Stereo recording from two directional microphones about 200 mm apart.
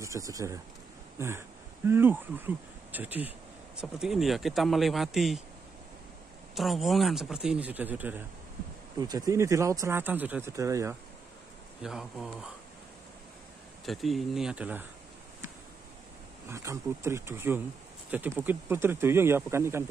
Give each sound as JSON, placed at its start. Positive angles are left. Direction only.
{"t": 0.0, "sound": "speech", "side_deg": -15}
{"t": 1.1, "sound": "a sound", "side_deg": -10}
{"t": 1.9, "sound": "speech", "side_deg": -10}
{"t": 6.5, "sound": "speech", "side_deg": 0}
{"t": 11.8, "sound": "speech", "side_deg": 0}
{"t": 13.8, "sound": "speech", "side_deg": 0}
{"t": 16.4, "sound": "speech", "side_deg": -15}